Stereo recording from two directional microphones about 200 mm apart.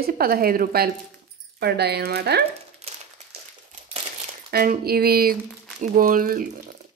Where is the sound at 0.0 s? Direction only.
50° right (ahead or behind).